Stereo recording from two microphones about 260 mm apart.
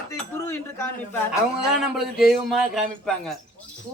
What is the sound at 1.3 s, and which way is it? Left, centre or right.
Speech, centre.